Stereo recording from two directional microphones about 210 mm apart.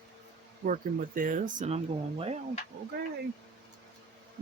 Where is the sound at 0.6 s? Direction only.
40° right (ahead or behind).